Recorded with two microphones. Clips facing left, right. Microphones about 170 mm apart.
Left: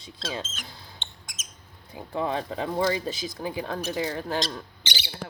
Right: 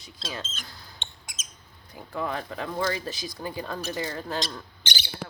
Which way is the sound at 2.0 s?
20° left (ahead or behind).